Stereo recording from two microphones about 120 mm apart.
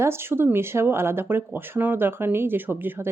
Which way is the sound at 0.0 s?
20° right (ahead or behind).